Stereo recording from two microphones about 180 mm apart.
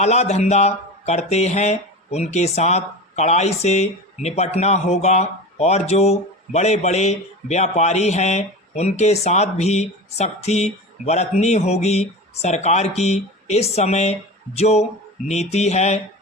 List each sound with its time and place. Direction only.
0.0 s speech: 40° left (ahead or behind)